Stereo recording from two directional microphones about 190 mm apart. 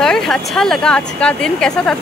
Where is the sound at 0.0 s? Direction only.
Centre (ahead or behind).